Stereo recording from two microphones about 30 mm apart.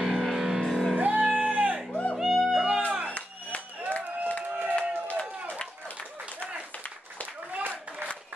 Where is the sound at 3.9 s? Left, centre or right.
Left.